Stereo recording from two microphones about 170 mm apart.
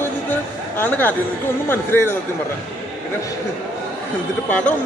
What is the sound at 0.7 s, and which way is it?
Speech, 10° left (ahead or behind).